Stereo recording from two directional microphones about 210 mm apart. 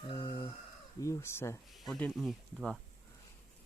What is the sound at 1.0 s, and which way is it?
Speech, 15° left (ahead or behind).